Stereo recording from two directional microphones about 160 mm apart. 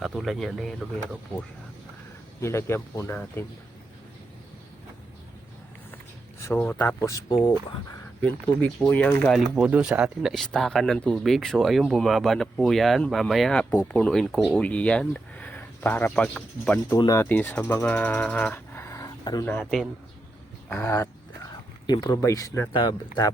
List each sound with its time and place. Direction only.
0.0 s speech: centre (ahead or behind)
2.4 s speech: 15° left (ahead or behind)
6.4 s speech: 15° left (ahead or behind)
8.2 s speech: 10° left (ahead or behind)
9.3 s speech: 5° right (ahead or behind); by 19.5 s 25° left (ahead or behind)
19.5 s speech: 5° left (ahead or behind)
20.7 s speech: 15° left (ahead or behind)
22.7 s speech: 30° left (ahead or behind)